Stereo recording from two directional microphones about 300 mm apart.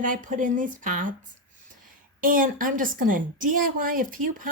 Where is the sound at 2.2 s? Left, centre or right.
Right.